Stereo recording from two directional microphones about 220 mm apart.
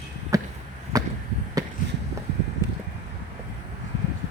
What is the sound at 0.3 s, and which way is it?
Chop, 15° right (ahead or behind).